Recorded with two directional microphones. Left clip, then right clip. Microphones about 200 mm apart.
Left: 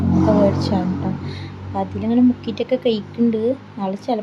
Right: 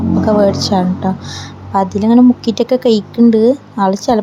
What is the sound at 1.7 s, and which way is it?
Speech, 35° right (ahead or behind).